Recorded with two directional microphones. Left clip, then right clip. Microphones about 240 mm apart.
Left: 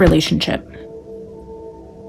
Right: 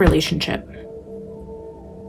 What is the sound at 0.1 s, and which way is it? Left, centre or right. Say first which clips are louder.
Speech: left 3 dB; left.